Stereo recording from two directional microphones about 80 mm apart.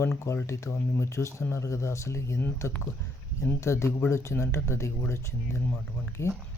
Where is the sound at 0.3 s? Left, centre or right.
Left.